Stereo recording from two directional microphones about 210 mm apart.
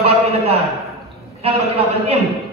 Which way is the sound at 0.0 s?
30° right (ahead or behind).